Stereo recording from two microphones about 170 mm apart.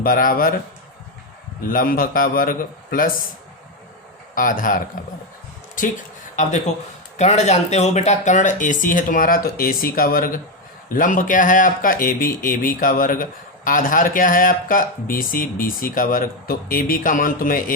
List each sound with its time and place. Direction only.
0.0 s speech: 55° left (ahead or behind)
1.6 s speech: 55° left (ahead or behind)
4.4 s speech: 55° left (ahead or behind)
6.3 s speech: 45° left (ahead or behind)